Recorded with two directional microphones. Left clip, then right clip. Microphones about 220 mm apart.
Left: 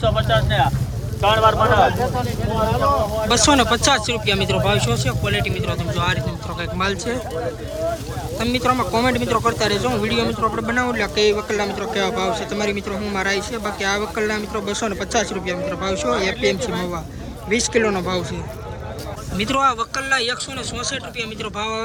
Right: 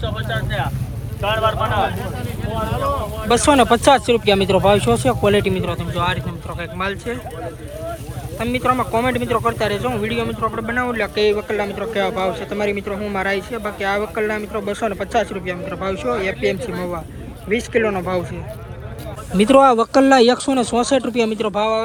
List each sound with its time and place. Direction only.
0.0 s speech: 30° left (ahead or behind)
1.2 s vehicle: 45° left (ahead or behind)
3.2 s speech: 5° left (ahead or behind)
8.4 s speech: 10° left (ahead or behind)
19.4 s speech: centre (ahead or behind)